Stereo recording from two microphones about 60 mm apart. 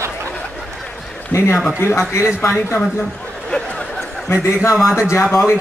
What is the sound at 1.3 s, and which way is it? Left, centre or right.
Speech, left.